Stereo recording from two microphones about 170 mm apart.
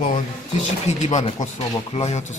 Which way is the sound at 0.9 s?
40° left (ahead or behind).